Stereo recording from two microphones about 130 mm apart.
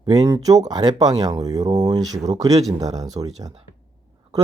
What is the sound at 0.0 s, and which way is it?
Speech, 30° right (ahead or behind).